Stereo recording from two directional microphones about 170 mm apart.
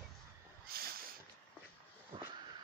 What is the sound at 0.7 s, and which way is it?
Boat, 65° right (ahead or behind).